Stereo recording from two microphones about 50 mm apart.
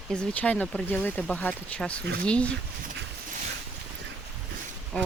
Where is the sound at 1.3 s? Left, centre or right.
Left.